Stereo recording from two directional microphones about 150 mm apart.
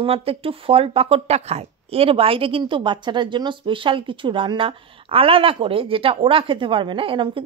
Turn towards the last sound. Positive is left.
turn(degrees=-35)  # may be behind; listen again after turning